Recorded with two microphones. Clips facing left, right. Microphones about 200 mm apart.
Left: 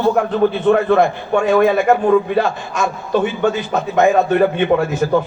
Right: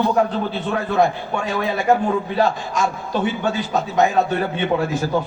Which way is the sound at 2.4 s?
55° left (ahead or behind).